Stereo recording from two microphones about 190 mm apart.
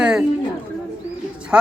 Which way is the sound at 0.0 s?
5° right (ahead or behind).